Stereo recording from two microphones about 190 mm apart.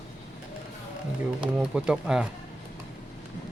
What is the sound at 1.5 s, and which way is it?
Speech, 5° right (ahead or behind).